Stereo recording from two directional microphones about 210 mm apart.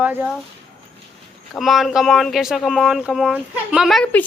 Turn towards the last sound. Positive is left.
turn(degrees=5)  # may be behind; listen again after turning